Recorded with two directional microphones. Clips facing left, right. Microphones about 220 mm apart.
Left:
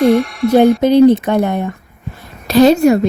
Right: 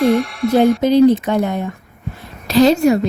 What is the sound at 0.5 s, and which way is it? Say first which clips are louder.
A woman's voice: left 3 dB; 60° left (ahead or behind).